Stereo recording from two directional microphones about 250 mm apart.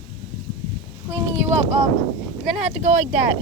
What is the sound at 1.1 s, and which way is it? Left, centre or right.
Speech, centre.